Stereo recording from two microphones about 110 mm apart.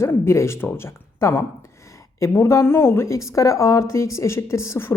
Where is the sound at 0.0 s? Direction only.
25° left (ahead or behind).